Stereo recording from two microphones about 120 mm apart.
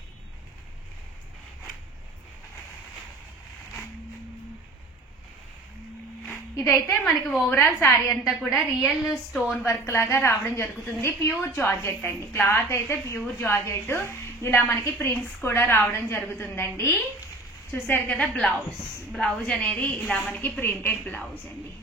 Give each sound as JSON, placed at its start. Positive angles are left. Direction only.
{"t": 6.3, "sound": "a sound", "side_deg": 25}
{"t": 7.4, "sound": "a woman's voice", "side_deg": 20}
{"t": 8.1, "sound": "a woman's voice", "side_deg": 0}
{"t": 9.7, "sound": "a woman's voice", "side_deg": 25}